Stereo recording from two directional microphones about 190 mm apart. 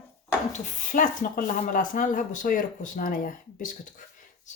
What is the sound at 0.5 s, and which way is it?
Speech, 40° left (ahead or behind).